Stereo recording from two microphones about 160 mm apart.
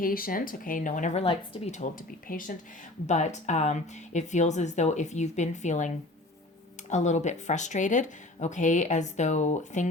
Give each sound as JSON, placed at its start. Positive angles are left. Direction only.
{"t": 0.0, "sound": "speech", "side_deg": 60}
{"t": 3.1, "sound": "speech", "side_deg": 45}
{"t": 6.9, "sound": "speech", "side_deg": 45}